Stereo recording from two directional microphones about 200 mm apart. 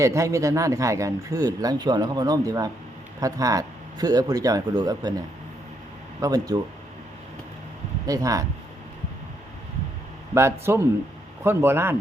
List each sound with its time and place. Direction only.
0.0 s a man's voice: 15° right (ahead or behind)
6.2 s speech: 20° right (ahead or behind)
8.0 s a man's voice: 15° right (ahead or behind)
10.3 s a man's voice: 15° right (ahead or behind)